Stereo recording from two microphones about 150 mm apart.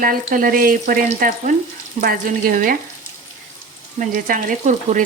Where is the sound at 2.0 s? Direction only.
60° right (ahead or behind).